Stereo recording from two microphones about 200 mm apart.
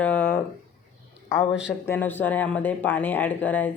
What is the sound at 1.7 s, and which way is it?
Speech, 10° left (ahead or behind).